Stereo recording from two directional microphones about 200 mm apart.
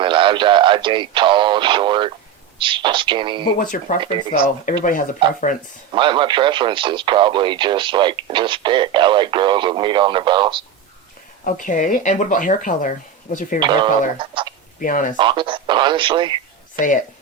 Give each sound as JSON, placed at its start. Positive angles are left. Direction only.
{"t": 0.0, "sound": "speech", "side_deg": -25}
{"t": 3.6, "sound": "speech", "side_deg": 40}
{"t": 5.9, "sound": "speech", "side_deg": -25}
{"t": 11.4, "sound": "speech", "side_deg": 40}
{"t": 13.6, "sound": "speech", "side_deg": -25}
{"t": 14.8, "sound": "speech", "side_deg": 40}
{"t": 15.1, "sound": "speech", "side_deg": -25}
{"t": 16.7, "sound": "speech", "side_deg": 40}